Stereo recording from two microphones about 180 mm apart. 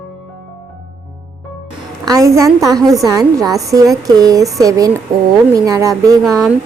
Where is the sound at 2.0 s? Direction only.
20° right (ahead or behind).